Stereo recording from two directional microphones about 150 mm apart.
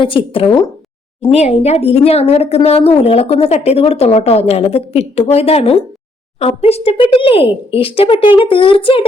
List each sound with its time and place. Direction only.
0.0 s speech: 35° left (ahead or behind)